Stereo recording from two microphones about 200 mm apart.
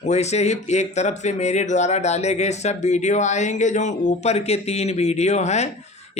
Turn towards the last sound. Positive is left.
turn(degrees=35)  # may be behind; listen again after turning